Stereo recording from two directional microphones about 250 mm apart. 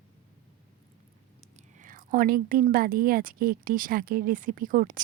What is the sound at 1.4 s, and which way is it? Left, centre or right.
Speech, right.